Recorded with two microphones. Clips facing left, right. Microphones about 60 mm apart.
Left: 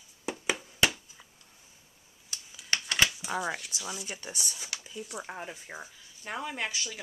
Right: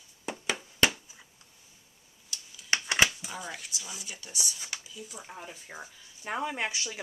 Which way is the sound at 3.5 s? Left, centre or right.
Centre.